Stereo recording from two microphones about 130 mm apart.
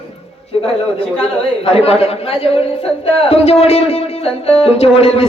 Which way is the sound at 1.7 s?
50° left (ahead or behind).